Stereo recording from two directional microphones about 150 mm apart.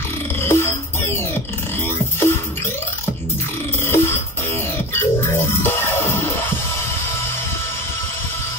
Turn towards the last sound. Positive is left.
turn(degrees=15)  # may be behind; listen again after turning